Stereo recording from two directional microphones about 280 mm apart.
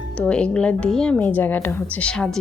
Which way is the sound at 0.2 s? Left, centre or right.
Centre.